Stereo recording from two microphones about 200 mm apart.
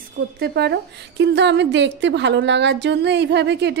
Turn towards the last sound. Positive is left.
turn(degrees=-60)  # may be behind; listen again after turning